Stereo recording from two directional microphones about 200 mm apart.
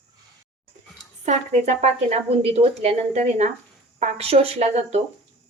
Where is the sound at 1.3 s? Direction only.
35° right (ahead or behind).